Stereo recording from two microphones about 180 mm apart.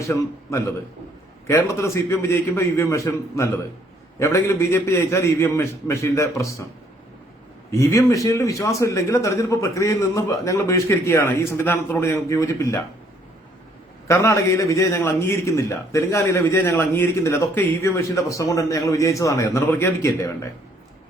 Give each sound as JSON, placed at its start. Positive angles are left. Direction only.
{"t": 0.5, "sound": "a man's voice", "side_deg": 15}
{"t": 7.7, "sound": "a man's voice", "side_deg": 15}
{"t": 14.1, "sound": "a man's voice", "side_deg": 15}